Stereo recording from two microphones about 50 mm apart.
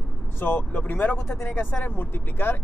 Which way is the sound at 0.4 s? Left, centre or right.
Left.